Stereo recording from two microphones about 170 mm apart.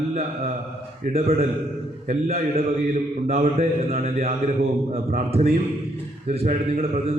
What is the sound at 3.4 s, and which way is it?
Speech, 40° right (ahead or behind).